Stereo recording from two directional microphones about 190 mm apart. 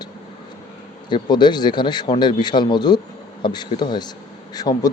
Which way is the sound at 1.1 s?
25° left (ahead or behind).